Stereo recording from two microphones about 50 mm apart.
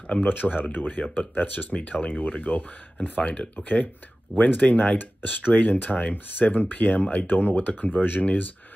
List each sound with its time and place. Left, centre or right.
0.1 s speech: left
3.6 s speech: left
4.9 s speech: left
5.5 s speech: left